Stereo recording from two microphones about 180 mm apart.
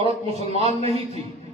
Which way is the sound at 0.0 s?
35° right (ahead or behind).